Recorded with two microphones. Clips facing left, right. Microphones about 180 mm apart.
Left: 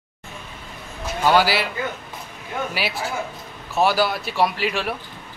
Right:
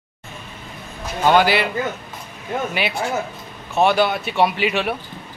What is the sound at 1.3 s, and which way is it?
Speech, 5° left (ahead or behind).